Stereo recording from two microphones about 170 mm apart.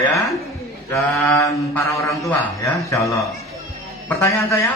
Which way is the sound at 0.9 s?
15° left (ahead or behind).